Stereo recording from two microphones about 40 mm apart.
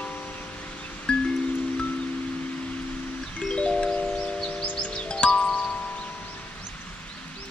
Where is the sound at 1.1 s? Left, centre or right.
Left.